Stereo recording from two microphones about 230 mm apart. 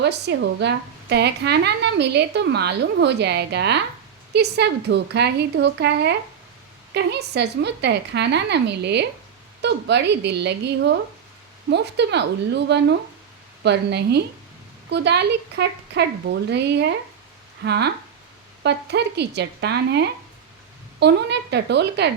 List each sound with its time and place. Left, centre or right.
0.0 s a woman's voice: right